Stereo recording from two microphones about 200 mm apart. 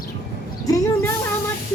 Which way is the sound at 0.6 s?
15° left (ahead or behind).